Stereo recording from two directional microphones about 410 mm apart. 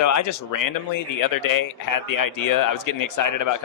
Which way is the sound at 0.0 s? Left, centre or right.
Left.